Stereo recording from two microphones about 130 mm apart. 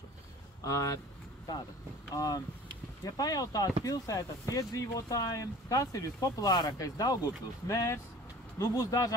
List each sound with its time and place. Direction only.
0.7 s speech: 25° left (ahead or behind)
2.1 s speech: 30° left (ahead or behind)